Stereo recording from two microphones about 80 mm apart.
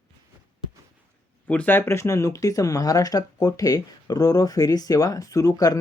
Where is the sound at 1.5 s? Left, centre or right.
Left.